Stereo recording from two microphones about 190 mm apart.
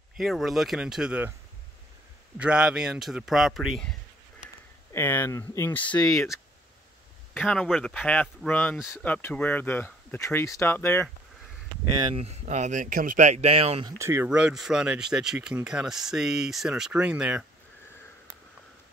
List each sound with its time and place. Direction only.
0.2 s speech: centre (ahead or behind)
2.3 s speech: 5° right (ahead or behind)
4.9 s speech: 10° left (ahead or behind)
12.1 s speech: 35° right (ahead or behind)
13.9 s speech: 15° right (ahead or behind)